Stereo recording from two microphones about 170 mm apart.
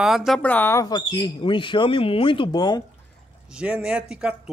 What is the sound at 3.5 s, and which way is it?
Speech, 5° right (ahead or behind).